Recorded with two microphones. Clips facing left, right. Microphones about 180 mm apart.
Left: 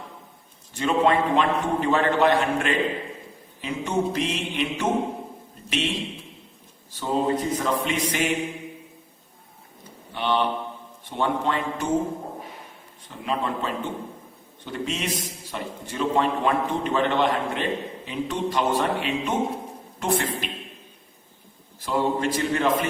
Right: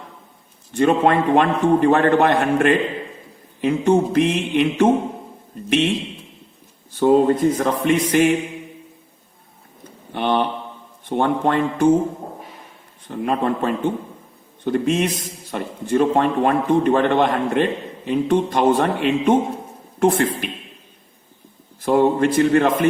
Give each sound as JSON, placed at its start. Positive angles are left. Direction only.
{"t": 0.8, "sound": "a man's voice", "side_deg": -55}
{"t": 7.0, "sound": "a man's voice", "side_deg": -55}
{"t": 10.2, "sound": "mantra", "side_deg": -55}
{"t": 11.1, "sound": "a man's voice", "side_deg": -50}
{"t": 13.1, "sound": "a man's voice", "side_deg": -55}
{"t": 21.8, "sound": "a man's voice", "side_deg": -55}